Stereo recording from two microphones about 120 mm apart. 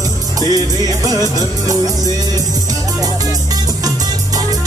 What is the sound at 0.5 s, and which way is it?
Music, 30° right (ahead or behind).